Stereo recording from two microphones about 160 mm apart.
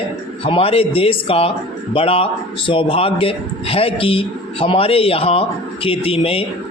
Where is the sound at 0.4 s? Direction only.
35° left (ahead or behind).